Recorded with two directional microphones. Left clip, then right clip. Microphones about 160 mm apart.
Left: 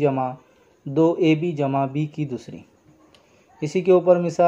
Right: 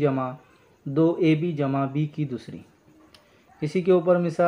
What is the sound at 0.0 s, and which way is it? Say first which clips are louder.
Speech: left 3 dB; 25° left (ahead or behind).